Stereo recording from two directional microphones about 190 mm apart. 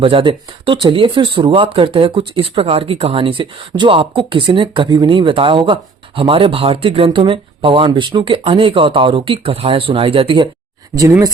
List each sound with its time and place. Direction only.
0.0 s speech: 30° right (ahead or behind)